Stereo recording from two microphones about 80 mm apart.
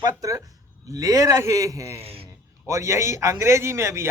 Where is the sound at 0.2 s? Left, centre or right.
Right.